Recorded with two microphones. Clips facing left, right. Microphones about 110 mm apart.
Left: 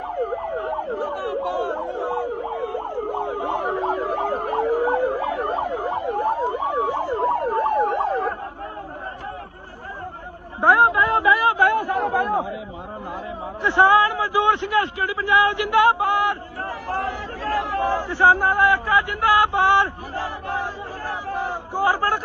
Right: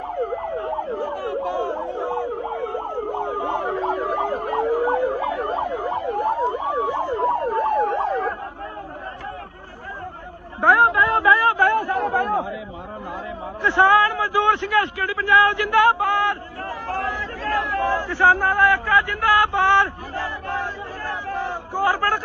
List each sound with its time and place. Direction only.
0.5 s siren: 20° left (ahead or behind)
3.5 s emergency vehicle: 15° left (ahead or behind)
4.6 s emergency vehicle: 15° right (ahead or behind)
5.3 s emergency vehicle: 15° left (ahead or behind)
10.6 s a sound: 15° left (ahead or behind)
13.6 s a man's voice: 15° left (ahead or behind)
21.1 s a sound: 15° left (ahead or behind)